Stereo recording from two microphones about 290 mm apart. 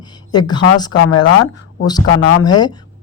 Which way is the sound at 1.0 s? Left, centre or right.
Left.